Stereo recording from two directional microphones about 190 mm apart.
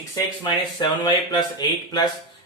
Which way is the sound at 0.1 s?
25° left (ahead or behind).